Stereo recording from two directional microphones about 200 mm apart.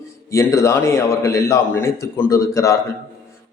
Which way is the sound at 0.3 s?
15° left (ahead or behind).